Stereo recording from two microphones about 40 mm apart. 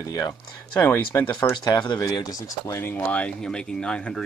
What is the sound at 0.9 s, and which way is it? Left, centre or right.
Speech, left.